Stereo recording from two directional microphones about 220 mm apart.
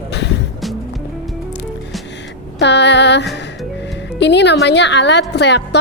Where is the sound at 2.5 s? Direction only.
50° left (ahead or behind).